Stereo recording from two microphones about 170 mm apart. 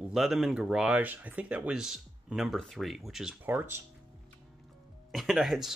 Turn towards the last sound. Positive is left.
turn(degrees=0)  # may be behind; listen again after turning